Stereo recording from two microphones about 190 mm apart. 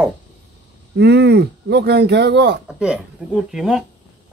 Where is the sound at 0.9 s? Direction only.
65° right (ahead or behind).